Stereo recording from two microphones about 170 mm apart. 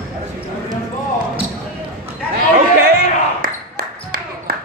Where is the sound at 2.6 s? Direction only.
60° right (ahead or behind).